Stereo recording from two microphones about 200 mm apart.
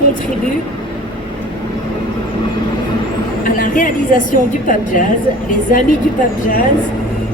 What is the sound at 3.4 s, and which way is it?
A woman's voice, 40° left (ahead or behind).